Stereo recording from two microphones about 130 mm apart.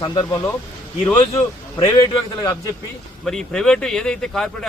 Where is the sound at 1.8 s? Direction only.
30° left (ahead or behind).